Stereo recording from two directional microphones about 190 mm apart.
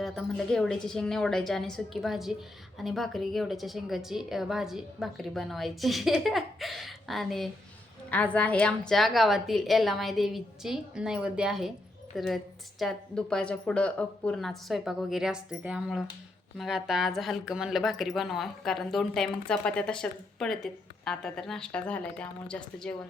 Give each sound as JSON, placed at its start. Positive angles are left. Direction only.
{"t": 0.0, "sound": "a woman's voice", "side_deg": 0}